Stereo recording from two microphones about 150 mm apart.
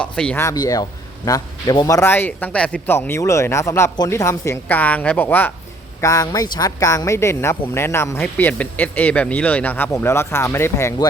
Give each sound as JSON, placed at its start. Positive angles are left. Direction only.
{"t": 0.0, "sound": "speech", "side_deg": 5}
{"t": 0.4, "sound": "a man's voice", "side_deg": 25}
{"t": 2.0, "sound": "speech", "side_deg": 15}